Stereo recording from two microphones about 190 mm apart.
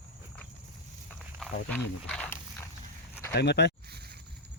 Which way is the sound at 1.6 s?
5° left (ahead or behind).